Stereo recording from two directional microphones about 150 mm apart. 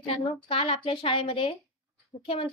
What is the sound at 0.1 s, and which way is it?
A woman's voice, 35° left (ahead or behind).